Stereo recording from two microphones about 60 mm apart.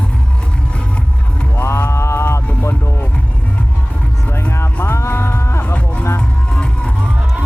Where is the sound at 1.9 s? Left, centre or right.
Left.